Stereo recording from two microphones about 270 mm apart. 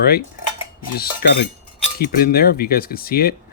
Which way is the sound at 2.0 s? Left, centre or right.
Left.